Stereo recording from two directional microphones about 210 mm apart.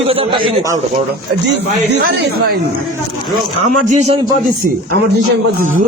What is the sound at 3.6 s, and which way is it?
Speech, 35° right (ahead or behind).